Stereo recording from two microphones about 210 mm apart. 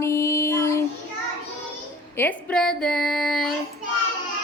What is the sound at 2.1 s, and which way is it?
Speech, 5° left (ahead or behind).